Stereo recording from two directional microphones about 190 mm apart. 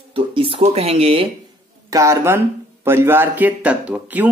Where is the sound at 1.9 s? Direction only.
15° right (ahead or behind).